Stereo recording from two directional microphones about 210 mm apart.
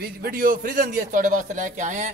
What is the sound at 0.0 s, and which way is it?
A man's voice, 45° right (ahead or behind).